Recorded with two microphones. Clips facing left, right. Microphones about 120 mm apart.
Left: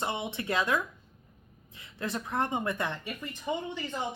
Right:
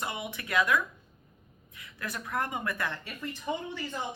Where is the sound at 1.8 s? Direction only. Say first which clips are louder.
Left 4 dB; 25° left (ahead or behind).